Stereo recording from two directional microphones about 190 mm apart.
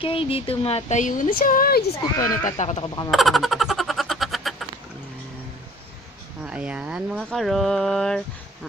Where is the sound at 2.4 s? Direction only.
40° left (ahead or behind).